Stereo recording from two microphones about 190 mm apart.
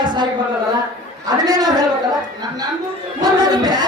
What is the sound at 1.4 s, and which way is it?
Speech, 20° right (ahead or behind).